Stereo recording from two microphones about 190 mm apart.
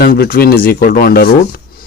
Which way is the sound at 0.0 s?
50° left (ahead or behind).